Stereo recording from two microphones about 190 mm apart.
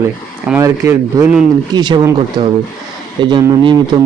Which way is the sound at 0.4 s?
10° right (ahead or behind).